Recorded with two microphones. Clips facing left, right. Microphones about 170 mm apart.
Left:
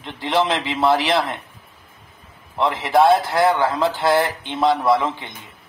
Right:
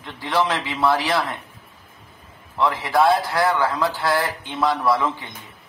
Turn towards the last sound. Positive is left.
turn(degrees=25)  # may be behind; listen again after turning